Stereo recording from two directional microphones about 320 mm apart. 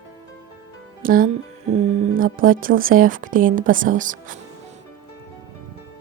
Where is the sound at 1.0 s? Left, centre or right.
Right.